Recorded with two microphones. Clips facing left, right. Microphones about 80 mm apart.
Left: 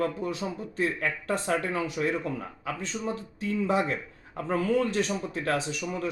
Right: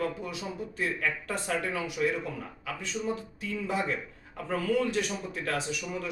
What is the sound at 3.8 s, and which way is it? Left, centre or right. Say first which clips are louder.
Speech: left 1 dB; left.